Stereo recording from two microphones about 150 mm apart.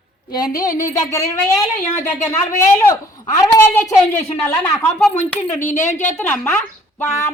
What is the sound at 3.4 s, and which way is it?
A woman's voice, 20° left (ahead or behind).